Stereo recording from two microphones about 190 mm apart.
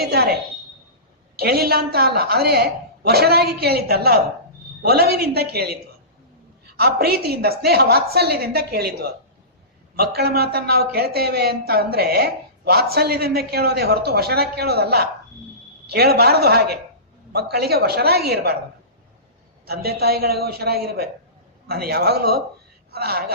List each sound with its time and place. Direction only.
0.0 s a sound: 55° right (ahead or behind)
1.4 s a man's voice: 55° right (ahead or behind)
19.6 s a man's voice: 55° right (ahead or behind)